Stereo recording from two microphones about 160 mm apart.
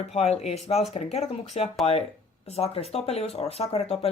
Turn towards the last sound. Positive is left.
turn(degrees=40)  # may be behind; listen again after turning